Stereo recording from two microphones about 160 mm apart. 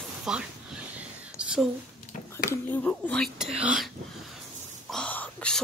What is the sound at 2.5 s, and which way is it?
Speech, 10° left (ahead or behind).